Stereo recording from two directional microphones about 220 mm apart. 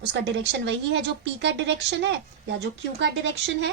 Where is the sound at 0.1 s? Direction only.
55° right (ahead or behind).